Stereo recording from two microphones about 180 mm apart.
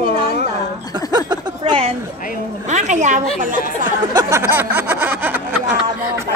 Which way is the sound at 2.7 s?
40° right (ahead or behind).